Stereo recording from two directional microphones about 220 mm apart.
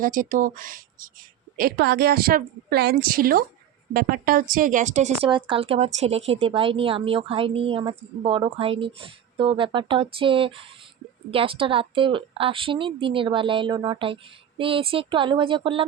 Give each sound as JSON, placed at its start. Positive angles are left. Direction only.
{"t": 0.0, "sound": "a woman's voice", "side_deg": -40}